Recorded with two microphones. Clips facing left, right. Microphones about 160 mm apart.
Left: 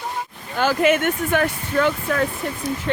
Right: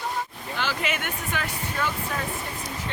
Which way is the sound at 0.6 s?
50° left (ahead or behind).